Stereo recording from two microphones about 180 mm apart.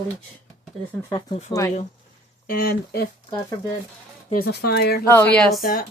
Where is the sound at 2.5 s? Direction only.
60° left (ahead or behind).